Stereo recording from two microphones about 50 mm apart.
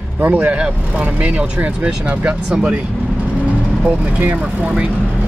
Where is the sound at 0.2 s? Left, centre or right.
Right.